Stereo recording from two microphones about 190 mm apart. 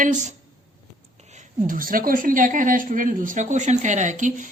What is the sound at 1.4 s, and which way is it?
A woman's voice, 45° right (ahead or behind).